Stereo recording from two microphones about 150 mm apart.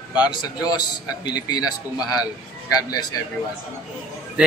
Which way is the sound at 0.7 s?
30° left (ahead or behind).